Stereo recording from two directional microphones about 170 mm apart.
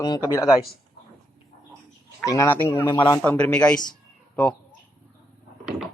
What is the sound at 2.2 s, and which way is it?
Speech, 15° left (ahead or behind).